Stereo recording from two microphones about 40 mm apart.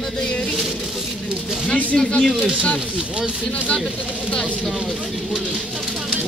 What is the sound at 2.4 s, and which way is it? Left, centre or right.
Speech, centre.